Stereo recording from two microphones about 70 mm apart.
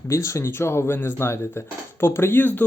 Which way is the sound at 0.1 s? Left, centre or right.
Left.